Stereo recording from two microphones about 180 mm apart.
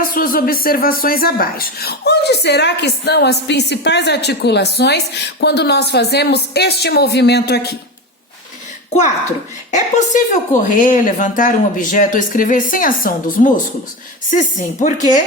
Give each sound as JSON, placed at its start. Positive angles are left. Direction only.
{"t": 0.0, "sound": "speech", "side_deg": 50}
{"t": 9.7, "sound": "a woman's voice", "side_deg": 45}